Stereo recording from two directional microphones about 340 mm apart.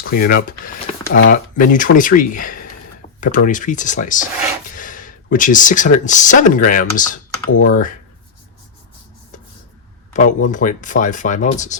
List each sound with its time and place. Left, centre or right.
0.0 s speech: left
10.1 s speech: left